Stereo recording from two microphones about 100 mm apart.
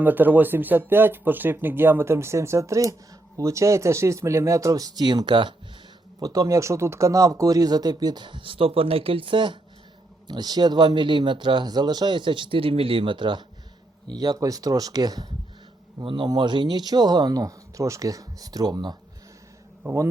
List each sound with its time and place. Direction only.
0.0 s speech: 20° right (ahead or behind); by 5.5 s 55° right (ahead or behind)
6.1 s speech: 35° right (ahead or behind); by 9.6 s 55° right (ahead or behind)
10.2 s speech: 45° right (ahead or behind)
14.1 s speech: 40° right (ahead or behind)
19.8 s a man's voice: 25° right (ahead or behind)